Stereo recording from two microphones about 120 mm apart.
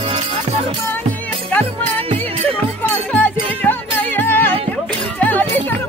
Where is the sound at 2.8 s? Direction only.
15° left (ahead or behind).